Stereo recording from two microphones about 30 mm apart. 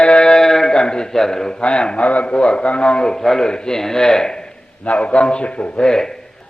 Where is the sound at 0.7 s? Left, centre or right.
Left.